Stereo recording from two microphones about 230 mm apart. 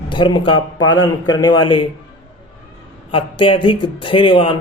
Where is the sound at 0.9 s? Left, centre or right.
Left.